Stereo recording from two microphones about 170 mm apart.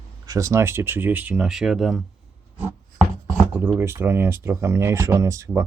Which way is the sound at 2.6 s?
5° right (ahead or behind).